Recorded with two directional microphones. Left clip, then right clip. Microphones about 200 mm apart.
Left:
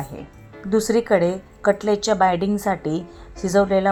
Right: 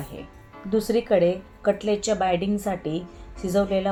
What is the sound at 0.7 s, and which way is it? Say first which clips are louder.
A woman's voice: left 4 dB; 50° left (ahead or behind).